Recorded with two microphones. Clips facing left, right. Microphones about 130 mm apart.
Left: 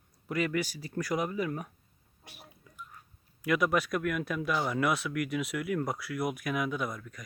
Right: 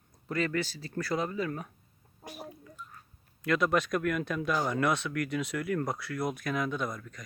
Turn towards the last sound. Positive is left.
turn(degrees=5)  # may be behind; listen again after turning